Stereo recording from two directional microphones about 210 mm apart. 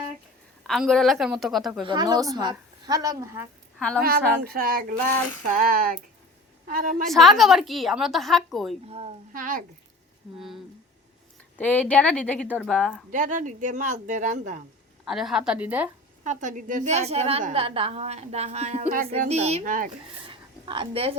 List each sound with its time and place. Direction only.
0.6 s a woman's voice: centre (ahead or behind)
1.8 s a woman's voice: 20° right (ahead or behind)
3.8 s a woman's voice: 5° left (ahead or behind)
4.0 s speech: 45° right (ahead or behind)
7.1 s a woman's voice: centre (ahead or behind)
8.9 s a woman's voice: 30° right (ahead or behind)
9.3 s a woman's voice: 40° right (ahead or behind)
11.5 s a woman's voice: 10° left (ahead or behind)
13.1 s a woman's voice: 40° right (ahead or behind)
15.0 s a woman's voice: centre (ahead or behind)
16.2 s a woman's voice: 35° right (ahead or behind)
20.2 s a sound: 25° right (ahead or behind)